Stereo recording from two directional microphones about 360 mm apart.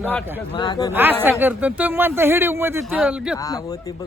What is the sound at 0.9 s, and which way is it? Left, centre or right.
Speech, centre.